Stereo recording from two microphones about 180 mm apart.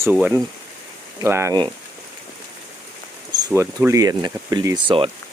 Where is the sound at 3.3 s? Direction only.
20° right (ahead or behind).